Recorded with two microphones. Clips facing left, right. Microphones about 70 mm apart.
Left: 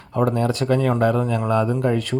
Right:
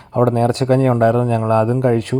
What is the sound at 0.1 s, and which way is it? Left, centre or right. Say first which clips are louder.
Speech: right 5 dB; right.